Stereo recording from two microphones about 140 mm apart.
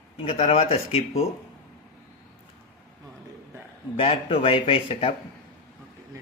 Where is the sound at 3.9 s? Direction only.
40° left (ahead or behind).